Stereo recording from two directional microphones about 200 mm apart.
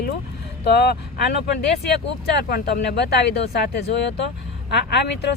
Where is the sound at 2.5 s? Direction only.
50° left (ahead or behind).